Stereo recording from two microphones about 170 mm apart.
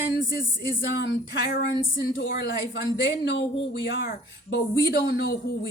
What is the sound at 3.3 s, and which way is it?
Speech, 90° left.